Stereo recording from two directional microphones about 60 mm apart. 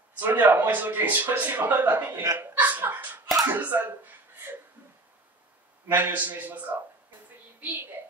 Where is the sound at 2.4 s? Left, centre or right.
Right.